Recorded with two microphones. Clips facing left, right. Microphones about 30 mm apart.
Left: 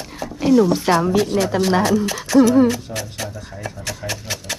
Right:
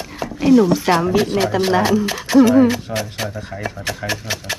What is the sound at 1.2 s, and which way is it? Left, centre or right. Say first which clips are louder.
Speech: right 1 dB; right.